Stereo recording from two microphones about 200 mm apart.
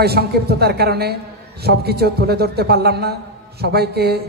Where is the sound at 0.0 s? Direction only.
50° right (ahead or behind).